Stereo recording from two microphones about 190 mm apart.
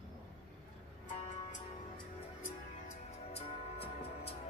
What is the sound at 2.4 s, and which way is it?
Music, 35° left (ahead or behind).